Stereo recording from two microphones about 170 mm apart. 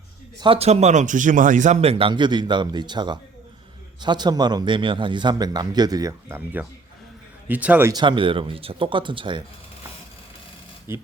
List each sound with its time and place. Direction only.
0.3 s a man's voice: 30° right (ahead or behind); by 7.9 s 10° right (ahead or behind)
7.9 s a man's voice: 25° right (ahead or behind)
10.9 s speech: 15° right (ahead or behind)